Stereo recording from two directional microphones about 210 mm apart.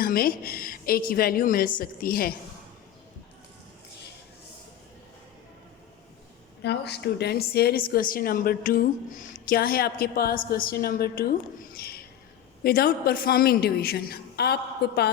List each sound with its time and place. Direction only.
0.0 s a woman's voice: 45° left (ahead or behind)
6.6 s a woman's voice: 50° left (ahead or behind)